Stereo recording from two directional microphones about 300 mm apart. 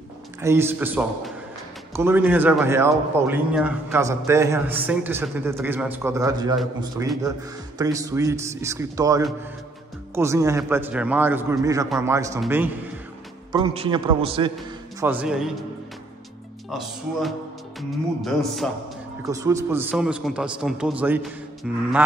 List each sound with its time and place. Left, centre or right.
0.4 s a man's voice: centre
15.0 s a man's voice: centre
17.7 s a man's voice: centre
19.2 s a man's voice: centre